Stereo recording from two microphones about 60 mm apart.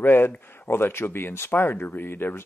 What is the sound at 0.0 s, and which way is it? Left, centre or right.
Speech, left.